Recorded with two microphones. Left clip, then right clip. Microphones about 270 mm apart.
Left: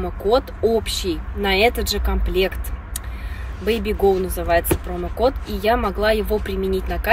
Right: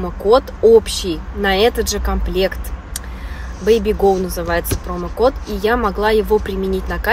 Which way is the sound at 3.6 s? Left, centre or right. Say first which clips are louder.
Right 5 dB; centre.